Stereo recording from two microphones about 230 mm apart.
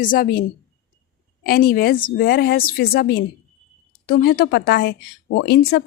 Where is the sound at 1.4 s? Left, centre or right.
Left.